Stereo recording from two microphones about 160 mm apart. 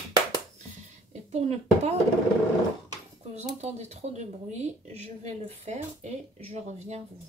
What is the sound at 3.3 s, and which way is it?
Speech, 45° right (ahead or behind).